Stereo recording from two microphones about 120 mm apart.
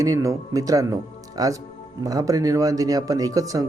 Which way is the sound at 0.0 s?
25° right (ahead or behind).